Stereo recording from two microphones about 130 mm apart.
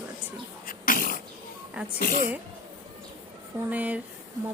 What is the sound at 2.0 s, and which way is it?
Speech, 90° left.